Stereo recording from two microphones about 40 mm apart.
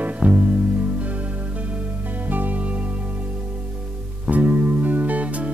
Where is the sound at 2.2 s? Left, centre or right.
Right.